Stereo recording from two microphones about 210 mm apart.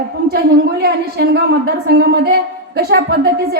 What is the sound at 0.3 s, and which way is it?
A woman's voice, 50° right (ahead or behind).